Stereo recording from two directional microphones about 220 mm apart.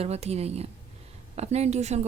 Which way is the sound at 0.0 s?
30° right (ahead or behind).